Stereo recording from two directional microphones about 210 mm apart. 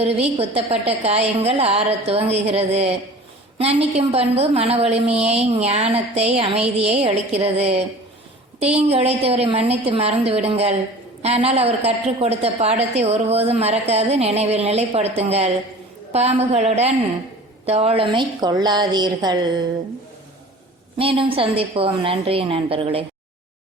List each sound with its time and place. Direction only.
0.0 s a woman's voice: 30° right (ahead or behind)
21.0 s a woman's voice: 25° right (ahead or behind)